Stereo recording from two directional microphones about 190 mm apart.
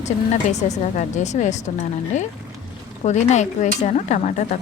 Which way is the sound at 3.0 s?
40° left (ahead or behind).